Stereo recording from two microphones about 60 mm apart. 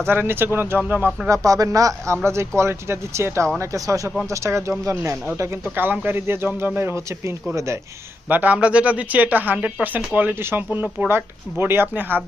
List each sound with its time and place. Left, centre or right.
0.0 s speech: right
1.3 s speech: right
2.2 s speech: right
3.6 s speech: right
4.3 s speech: right
5.6 s speech: right
8.3 s speech: right